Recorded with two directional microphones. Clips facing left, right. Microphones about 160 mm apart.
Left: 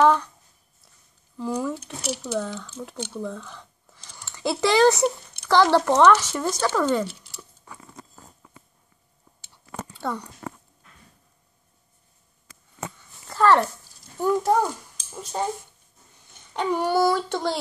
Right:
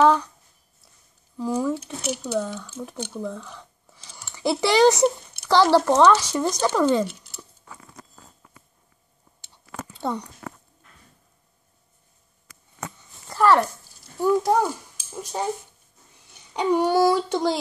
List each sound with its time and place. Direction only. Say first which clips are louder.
0.0 s speech: right 1 dB; 5° right (ahead or behind)
1.4 s speech: right 3 dB; 10° right (ahead or behind)
2.0 s speech: right 2 dB; 5° left (ahead or behind)
2.4 s speech: right 1 dB; 5° right (ahead or behind)
9.9 s a sound: right 2 dB; 15° right (ahead or behind)
10.4 s a sound: left 2 dB; 25° left (ahead or behind)
12.9 s a sound: even; 10° right (ahead or behind)
14.2 s speech: right 1 dB; 10° right (ahead or behind)
16.9 s speech: right 2 dB; 10° right (ahead or behind)